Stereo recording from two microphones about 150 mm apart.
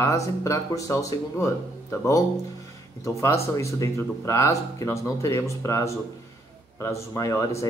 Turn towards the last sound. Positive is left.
turn(degrees=20)  # may be behind; listen again after turning